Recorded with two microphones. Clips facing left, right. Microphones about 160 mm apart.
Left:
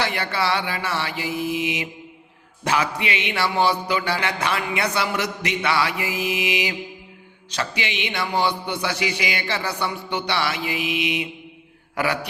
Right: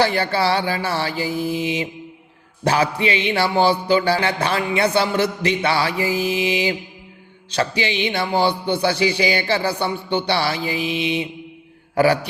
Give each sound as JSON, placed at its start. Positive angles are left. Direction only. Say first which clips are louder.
{"t": 0.0, "sound": "music", "louder": "right 6 dB", "side_deg": -30}